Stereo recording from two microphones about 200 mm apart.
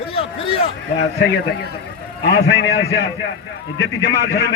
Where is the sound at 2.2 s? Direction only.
55° left (ahead or behind).